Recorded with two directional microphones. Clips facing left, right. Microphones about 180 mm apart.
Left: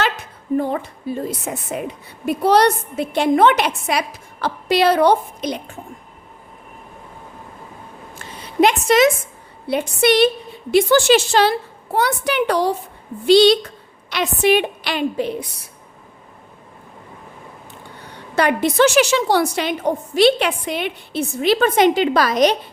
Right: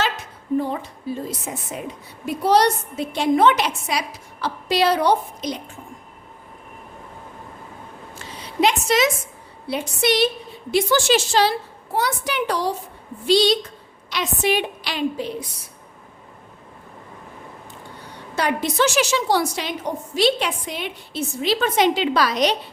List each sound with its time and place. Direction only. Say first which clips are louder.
0.5 s a woman's voice: left 3 dB; 55° left (ahead or behind)
8.1 s a sound: left 5 dB; 55° left (ahead or behind)
9.6 s a woman's voice: left 5 dB; 55° left (ahead or behind)
18.3 s a woman's voice: left 5 dB; 60° left (ahead or behind)